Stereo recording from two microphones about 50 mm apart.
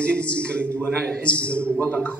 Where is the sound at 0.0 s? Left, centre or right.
Left.